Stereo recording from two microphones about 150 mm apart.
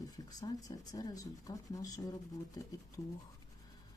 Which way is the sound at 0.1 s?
25° left (ahead or behind).